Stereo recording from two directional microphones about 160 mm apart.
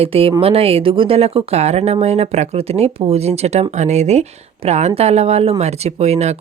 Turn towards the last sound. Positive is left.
turn(degrees=-45)  # may be behind; listen again after turning